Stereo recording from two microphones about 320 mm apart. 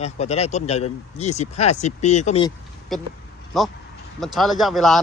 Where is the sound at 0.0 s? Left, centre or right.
Centre.